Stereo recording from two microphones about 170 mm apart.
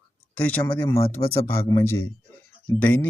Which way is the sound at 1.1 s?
15° left (ahead or behind).